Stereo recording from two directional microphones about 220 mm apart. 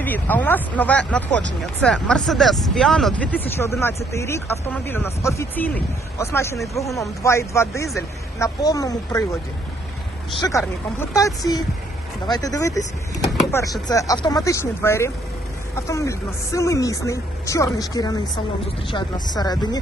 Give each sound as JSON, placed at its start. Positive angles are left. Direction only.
{"t": 0.0, "sound": "speech", "side_deg": 10}
{"t": 10.4, "sound": "speech", "side_deg": 15}
{"t": 12.3, "sound": "speech", "side_deg": 15}